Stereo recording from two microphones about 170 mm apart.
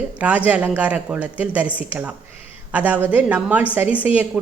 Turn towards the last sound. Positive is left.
turn(degrees=-10)  # may be behind; listen again after turning